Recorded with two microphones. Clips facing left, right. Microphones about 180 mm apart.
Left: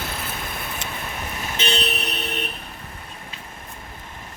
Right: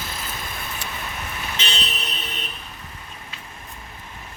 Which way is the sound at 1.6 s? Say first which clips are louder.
Left 10 dB; 60° left (ahead or behind).